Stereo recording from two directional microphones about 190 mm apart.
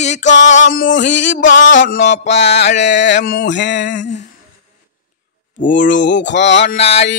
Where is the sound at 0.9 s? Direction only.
70° left (ahead or behind).